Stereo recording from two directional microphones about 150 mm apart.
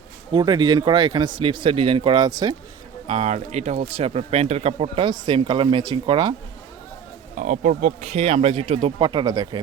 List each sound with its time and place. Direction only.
0.3 s speech: 30° right (ahead or behind)
3.1 s speech: 45° right (ahead or behind); by 6.3 s 30° right (ahead or behind)
7.3 s speech: 60° right (ahead or behind); by 9.6 s 25° right (ahead or behind)